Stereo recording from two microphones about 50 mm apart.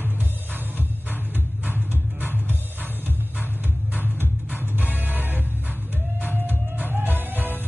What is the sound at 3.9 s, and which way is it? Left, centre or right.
Music, right.